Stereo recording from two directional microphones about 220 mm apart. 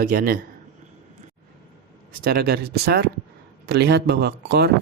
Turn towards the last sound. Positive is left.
turn(degrees=-45)  # may be behind; listen again after turning